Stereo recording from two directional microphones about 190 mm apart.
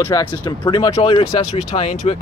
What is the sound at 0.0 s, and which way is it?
Speech, 20° left (ahead or behind).